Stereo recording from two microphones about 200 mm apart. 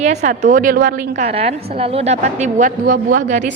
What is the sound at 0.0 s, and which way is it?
A woman's voice, 35° right (ahead or behind).